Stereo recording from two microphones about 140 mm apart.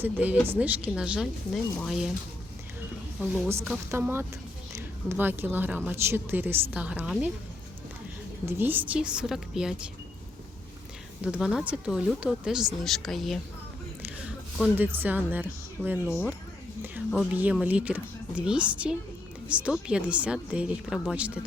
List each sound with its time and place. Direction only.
0.0 s speech: 10° right (ahead or behind)
3.2 s speech: 5° right (ahead or behind)
3.9 s speech: 15° right (ahead or behind)
8.4 s speech: 15° right (ahead or behind)
11.2 s speech: 5° right (ahead or behind)
14.0 s speech: 10° right (ahead or behind)
17.3 s speech: 10° right (ahead or behind)